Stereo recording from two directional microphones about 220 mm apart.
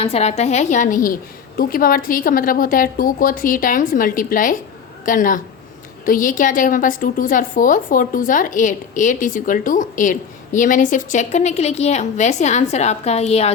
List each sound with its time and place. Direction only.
0.0 s a woman's voice: 30° left (ahead or behind)